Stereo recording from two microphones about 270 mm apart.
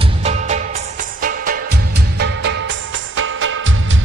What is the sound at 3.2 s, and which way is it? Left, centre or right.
Music, right.